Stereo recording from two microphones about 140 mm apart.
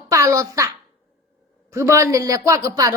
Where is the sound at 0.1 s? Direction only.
25° right (ahead or behind).